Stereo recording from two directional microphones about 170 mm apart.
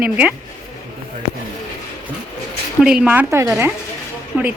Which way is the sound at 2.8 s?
5° right (ahead or behind).